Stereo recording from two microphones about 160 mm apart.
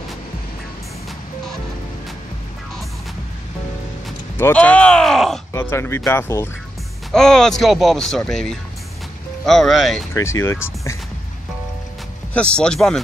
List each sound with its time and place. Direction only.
4.4 s speech: 10° left (ahead or behind)
5.5 s speech: 15° left (ahead or behind)
7.1 s speech: 5° left (ahead or behind)
10.1 s speech: 15° left (ahead or behind)
12.4 s speech: 5° left (ahead or behind)